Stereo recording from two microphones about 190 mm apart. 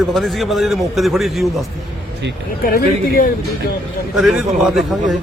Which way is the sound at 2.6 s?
50° left (ahead or behind).